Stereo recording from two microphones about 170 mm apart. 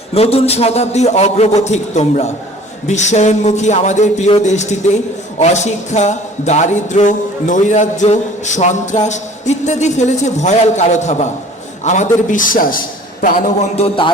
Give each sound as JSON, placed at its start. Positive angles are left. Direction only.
{"t": 0.1, "sound": "a man's voice", "side_deg": 35}
{"t": 2.8, "sound": "music", "side_deg": 40}
{"t": 13.7, "sound": "a man's voice", "side_deg": 35}